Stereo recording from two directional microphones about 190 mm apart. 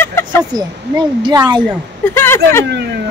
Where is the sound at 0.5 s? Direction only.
20° right (ahead or behind).